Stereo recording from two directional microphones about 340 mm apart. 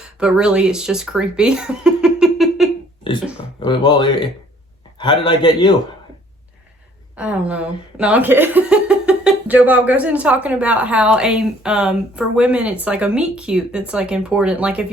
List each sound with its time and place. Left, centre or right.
0.0 s speech: centre
3.6 s a man's voice: centre
7.2 s speech: centre